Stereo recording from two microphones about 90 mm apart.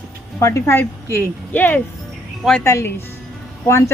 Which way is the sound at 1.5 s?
20° left (ahead or behind).